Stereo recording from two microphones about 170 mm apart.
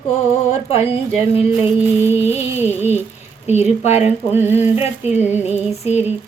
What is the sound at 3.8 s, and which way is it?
Music, 40° left (ahead or behind).